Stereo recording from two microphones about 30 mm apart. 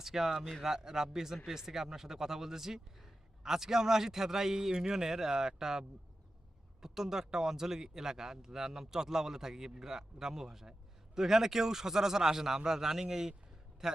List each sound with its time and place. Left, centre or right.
0.0 s speech: centre
6.8 s speech: centre